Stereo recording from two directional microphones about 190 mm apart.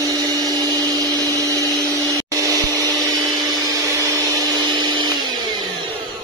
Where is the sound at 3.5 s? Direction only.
20° right (ahead or behind).